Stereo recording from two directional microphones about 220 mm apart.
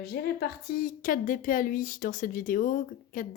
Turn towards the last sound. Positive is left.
turn(degrees=40)  # may be behind; listen again after turning